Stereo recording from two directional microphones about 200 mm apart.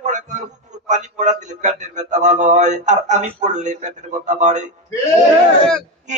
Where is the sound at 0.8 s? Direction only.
35° right (ahead or behind).